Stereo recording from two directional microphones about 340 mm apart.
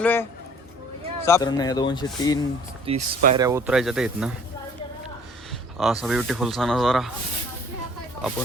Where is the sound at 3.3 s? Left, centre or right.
Centre.